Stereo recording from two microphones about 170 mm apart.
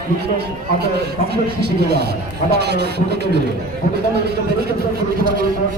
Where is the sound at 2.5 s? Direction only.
75° right (ahead or behind).